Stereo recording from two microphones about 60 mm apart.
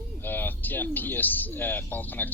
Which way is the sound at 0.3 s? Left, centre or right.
Left.